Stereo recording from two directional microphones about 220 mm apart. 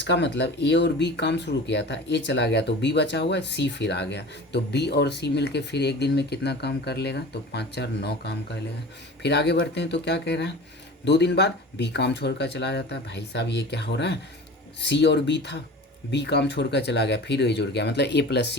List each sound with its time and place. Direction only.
0.0 s speech: 50° left (ahead or behind)